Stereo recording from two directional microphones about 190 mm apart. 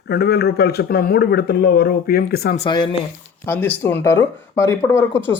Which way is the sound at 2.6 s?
25° left (ahead or behind).